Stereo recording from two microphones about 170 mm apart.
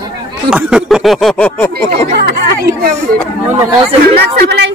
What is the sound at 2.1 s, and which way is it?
Speech, 75° right (ahead or behind).